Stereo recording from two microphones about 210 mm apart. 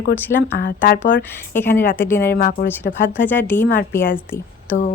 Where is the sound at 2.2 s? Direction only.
40° left (ahead or behind).